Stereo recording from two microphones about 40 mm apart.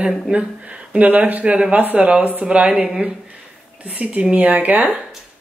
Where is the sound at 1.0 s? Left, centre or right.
Right.